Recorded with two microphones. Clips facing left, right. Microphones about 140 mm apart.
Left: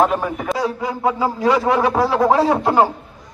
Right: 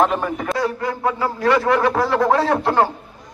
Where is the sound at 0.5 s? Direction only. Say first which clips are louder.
Even; 15° left (ahead or behind).